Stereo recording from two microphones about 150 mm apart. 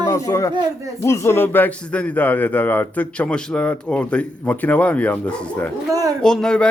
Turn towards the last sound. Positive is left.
turn(degrees=5)  # may be behind; listen again after turning